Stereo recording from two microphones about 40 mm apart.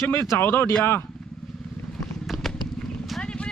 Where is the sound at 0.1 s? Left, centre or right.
Left.